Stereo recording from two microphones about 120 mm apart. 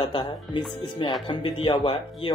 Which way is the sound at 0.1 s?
45° left (ahead or behind).